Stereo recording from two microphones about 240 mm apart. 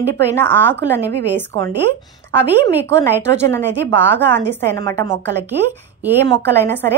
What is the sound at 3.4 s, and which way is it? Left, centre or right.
Speech, centre.